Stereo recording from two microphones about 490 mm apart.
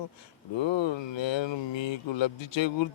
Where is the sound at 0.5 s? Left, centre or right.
Left.